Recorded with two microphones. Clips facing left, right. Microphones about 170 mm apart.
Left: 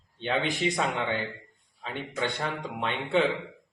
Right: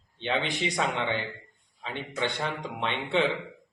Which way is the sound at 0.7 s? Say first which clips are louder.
Even; 5° left (ahead or behind).